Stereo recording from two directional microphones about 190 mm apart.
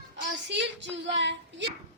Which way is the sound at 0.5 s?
70° right (ahead or behind).